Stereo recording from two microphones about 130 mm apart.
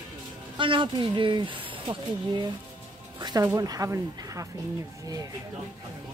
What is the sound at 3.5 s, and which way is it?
Speech, 25° right (ahead or behind).